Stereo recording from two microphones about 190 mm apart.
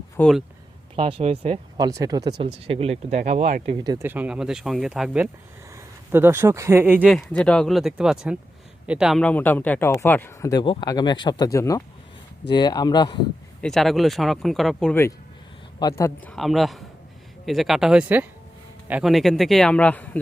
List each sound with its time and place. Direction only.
0.2 s speech: centre (ahead or behind)
0.9 s speech: 30° right (ahead or behind)
1.8 s speech: 20° right (ahead or behind); by 3.8 s 40° right (ahead or behind)
3.8 s speech: 15° right (ahead or behind)
7.1 s speech: 5° left (ahead or behind); by 13.1 s 20° left (ahead or behind)
13.6 s speech: centre (ahead or behind)
16.3 s speech: centre (ahead or behind)